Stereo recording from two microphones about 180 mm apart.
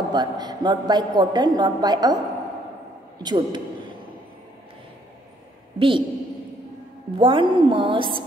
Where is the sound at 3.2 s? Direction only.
25° right (ahead or behind).